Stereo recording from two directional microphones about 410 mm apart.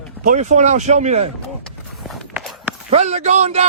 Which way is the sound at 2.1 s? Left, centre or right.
Centre.